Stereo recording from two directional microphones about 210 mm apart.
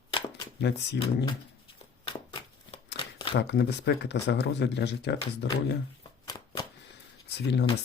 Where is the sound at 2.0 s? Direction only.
25° left (ahead or behind).